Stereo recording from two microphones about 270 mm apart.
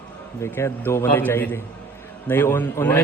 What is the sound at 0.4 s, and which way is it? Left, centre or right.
Speech, centre.